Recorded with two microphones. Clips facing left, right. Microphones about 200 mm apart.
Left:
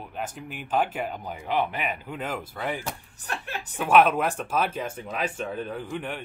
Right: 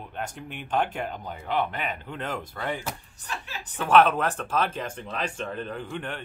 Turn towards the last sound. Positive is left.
turn(degrees=10)  # may be behind; listen again after turning